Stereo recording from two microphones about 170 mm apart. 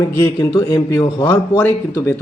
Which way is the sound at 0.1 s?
15° left (ahead or behind).